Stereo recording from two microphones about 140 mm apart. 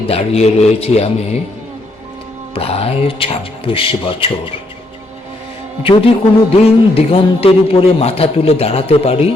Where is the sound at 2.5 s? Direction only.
45° left (ahead or behind).